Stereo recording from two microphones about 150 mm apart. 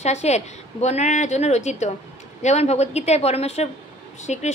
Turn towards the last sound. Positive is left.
turn(degrees=50)  # may be behind; listen again after turning